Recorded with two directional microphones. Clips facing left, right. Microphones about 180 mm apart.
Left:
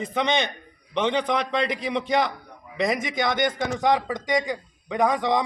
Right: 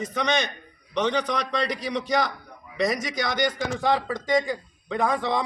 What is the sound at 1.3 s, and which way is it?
Speech, 25° left (ahead or behind).